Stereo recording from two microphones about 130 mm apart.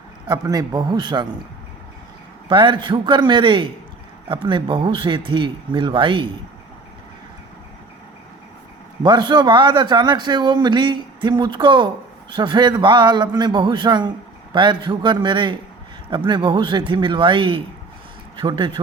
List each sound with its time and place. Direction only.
0.3 s a man's voice: 30° right (ahead or behind)
2.5 s a man's voice: 40° right (ahead or behind)
9.0 s a man's voice: 35° right (ahead or behind)